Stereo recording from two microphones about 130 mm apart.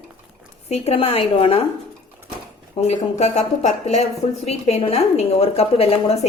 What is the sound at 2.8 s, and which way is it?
A woman's voice, 60° left (ahead or behind).